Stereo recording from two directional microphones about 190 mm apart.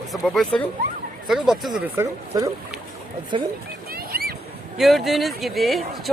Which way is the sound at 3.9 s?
50° right (ahead or behind).